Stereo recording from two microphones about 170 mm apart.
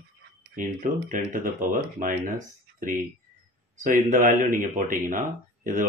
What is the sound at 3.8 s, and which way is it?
Speech, 50° right (ahead or behind).